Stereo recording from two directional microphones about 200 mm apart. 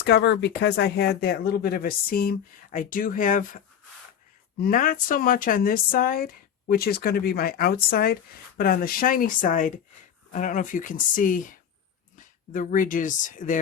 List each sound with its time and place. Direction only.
0.0 s speech: 55° left (ahead or behind); by 13.6 s 40° left (ahead or behind)